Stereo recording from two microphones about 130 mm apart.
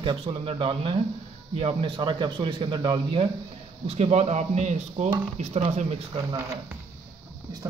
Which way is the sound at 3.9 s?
55° right (ahead or behind).